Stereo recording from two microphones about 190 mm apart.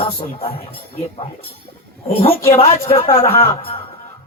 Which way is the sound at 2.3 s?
15° left (ahead or behind).